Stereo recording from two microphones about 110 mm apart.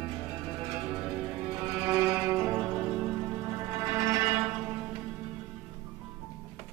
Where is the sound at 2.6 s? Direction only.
5° right (ahead or behind).